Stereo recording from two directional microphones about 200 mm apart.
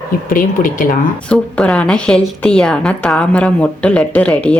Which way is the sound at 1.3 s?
5° left (ahead or behind).